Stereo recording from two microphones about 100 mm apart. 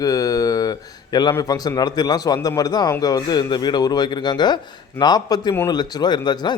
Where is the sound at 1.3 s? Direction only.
40° left (ahead or behind).